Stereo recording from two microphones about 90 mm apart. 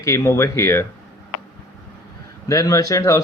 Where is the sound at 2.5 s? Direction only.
35° left (ahead or behind).